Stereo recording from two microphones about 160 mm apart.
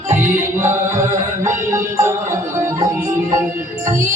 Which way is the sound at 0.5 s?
15° right (ahead or behind).